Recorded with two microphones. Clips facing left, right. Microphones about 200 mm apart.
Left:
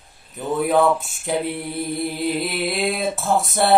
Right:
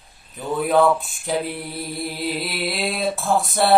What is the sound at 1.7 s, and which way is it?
Mantra, 20° left (ahead or behind).